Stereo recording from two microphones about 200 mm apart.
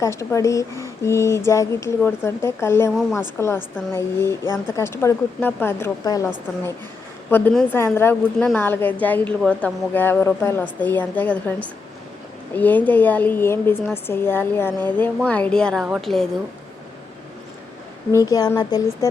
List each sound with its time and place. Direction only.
0.0 s speech: 15° left (ahead or behind)
7.3 s speech: 10° left (ahead or behind)
12.5 s a woman's voice: 10° left (ahead or behind)
18.1 s speech: 15° left (ahead or behind)